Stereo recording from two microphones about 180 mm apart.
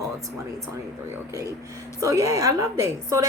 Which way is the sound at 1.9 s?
20° right (ahead or behind).